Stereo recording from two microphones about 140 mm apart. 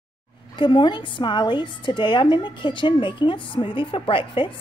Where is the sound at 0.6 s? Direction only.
35° left (ahead or behind).